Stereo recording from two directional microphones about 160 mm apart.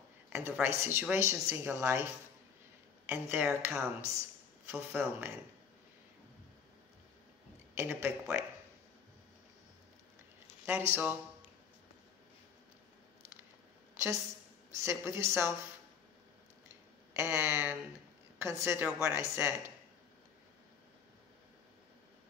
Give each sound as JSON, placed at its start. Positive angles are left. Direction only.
{"t": 0.3, "sound": "a woman's voice", "side_deg": -15}
{"t": 3.1, "sound": "a woman's voice", "side_deg": -10}
{"t": 7.7, "sound": "a woman's voice", "side_deg": -15}
{"t": 10.9, "sound": "a woman's voice", "side_deg": -10}
{"t": 13.9, "sound": "a woman's voice", "side_deg": -15}
{"t": 17.1, "sound": "a woman's voice", "side_deg": -15}